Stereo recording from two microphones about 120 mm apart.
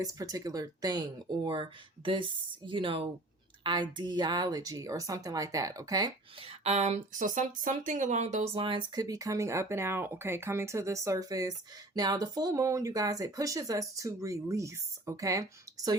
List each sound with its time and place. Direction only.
0.0 s speech: 30° right (ahead or behind)
6.4 s speech: 65° right (ahead or behind); by 16.0 s 30° right (ahead or behind)